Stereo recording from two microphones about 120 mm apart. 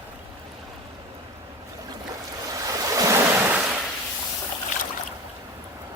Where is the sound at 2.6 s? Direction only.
30° right (ahead or behind).